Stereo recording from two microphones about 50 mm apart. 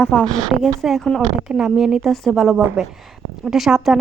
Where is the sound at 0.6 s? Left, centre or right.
Centre.